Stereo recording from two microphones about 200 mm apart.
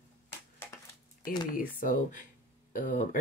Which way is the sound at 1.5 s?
40° left (ahead or behind).